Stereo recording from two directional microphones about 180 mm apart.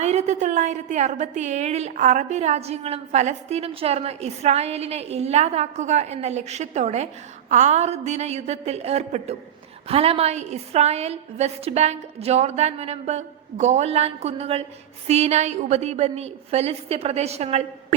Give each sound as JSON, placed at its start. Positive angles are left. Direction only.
{"t": 0.0, "sound": "a woman's voice", "side_deg": -40}